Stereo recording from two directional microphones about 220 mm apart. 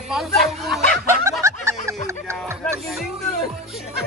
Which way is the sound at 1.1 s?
10° right (ahead or behind).